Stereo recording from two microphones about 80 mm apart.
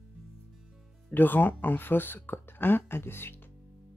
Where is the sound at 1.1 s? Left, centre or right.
Left.